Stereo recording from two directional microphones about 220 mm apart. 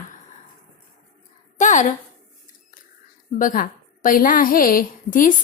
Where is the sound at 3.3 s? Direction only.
40° left (ahead or behind).